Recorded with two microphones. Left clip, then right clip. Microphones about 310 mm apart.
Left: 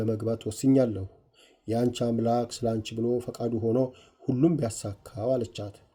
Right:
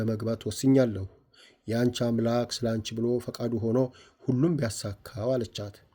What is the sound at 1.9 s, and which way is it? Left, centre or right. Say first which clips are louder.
Speech: left 1 dB; right.